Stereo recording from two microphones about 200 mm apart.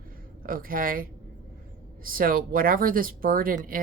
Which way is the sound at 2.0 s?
45° right (ahead or behind).